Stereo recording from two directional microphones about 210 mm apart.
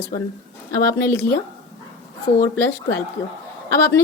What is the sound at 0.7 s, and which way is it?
Speech, 15° left (ahead or behind).